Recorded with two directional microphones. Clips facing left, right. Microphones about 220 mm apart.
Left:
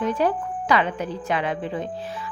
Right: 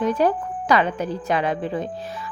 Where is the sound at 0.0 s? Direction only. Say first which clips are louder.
Right 2 dB; 40° right (ahead or behind).